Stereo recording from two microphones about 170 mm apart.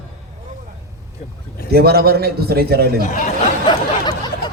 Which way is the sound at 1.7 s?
65° right (ahead or behind).